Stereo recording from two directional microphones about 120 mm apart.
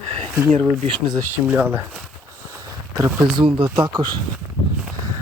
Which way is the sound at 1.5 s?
15° right (ahead or behind).